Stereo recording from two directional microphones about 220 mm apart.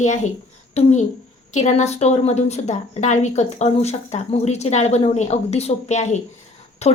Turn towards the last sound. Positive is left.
turn(degrees=30)  # may be behind; listen again after turning